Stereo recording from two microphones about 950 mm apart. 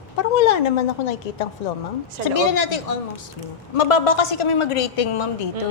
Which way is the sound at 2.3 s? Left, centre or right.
Left.